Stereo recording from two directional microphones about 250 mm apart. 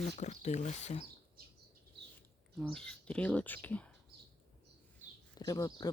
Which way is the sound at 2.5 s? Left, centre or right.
Centre.